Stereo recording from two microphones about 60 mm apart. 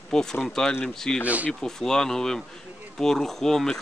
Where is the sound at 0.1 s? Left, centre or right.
Centre.